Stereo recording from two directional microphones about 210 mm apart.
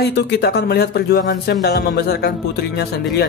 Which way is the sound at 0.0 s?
50° left (ahead or behind).